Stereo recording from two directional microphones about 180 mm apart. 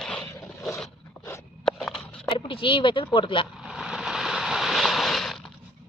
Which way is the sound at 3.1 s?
30° left (ahead or behind).